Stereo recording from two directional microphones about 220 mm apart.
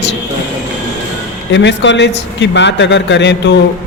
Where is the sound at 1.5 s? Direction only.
55° left (ahead or behind).